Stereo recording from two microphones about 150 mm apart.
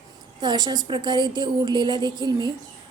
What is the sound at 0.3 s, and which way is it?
A woman's voice, 30° right (ahead or behind).